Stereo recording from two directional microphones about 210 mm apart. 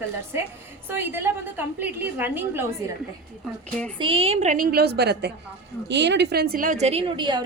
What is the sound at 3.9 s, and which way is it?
A woman's voice, 25° right (ahead or behind).